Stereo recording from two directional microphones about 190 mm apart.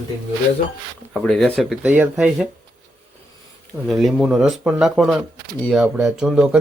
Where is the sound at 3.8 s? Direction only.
Centre (ahead or behind).